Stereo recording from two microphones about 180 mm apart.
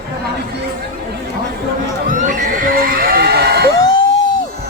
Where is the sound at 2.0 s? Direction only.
45° right (ahead or behind); by 3.7 s 60° right (ahead or behind).